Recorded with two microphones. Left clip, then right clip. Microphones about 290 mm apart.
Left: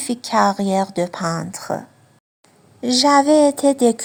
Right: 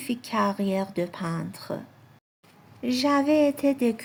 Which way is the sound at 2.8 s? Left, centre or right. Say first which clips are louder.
Left 10 dB; left.